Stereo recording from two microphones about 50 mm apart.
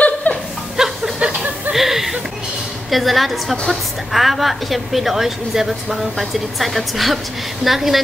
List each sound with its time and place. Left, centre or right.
0.3 s chuckle: left
0.7 s a sound: centre
2.9 s a woman's voice: centre